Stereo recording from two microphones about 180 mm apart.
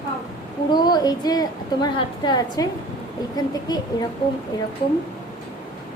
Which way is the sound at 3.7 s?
25° left (ahead or behind).